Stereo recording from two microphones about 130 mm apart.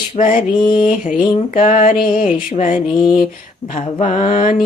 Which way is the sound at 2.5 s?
80° left.